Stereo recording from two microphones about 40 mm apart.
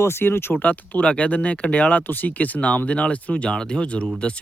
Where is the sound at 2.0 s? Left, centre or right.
Left.